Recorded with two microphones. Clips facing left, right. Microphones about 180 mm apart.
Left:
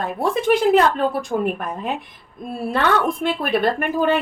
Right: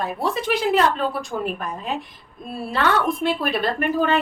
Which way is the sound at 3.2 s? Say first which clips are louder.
Left 2 dB; 55° left (ahead or behind).